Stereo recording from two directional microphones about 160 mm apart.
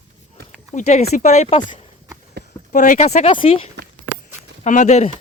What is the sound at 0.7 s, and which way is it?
Speech, 45° left (ahead or behind).